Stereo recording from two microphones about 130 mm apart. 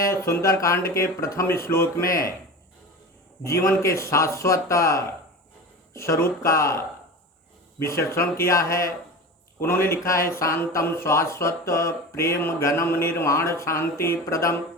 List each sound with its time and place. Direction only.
0.0 s speech: 20° left (ahead or behind)
3.4 s speech: 25° left (ahead or behind)